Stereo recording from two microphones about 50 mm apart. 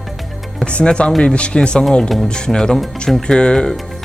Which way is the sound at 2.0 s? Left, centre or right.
Centre.